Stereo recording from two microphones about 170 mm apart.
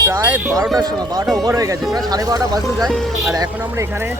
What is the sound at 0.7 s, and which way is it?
Speech, 25° right (ahead or behind).